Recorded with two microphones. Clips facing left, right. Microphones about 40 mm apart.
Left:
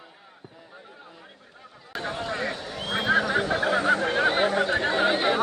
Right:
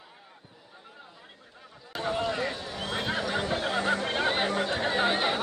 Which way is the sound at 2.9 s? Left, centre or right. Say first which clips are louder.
Left 8 dB; left.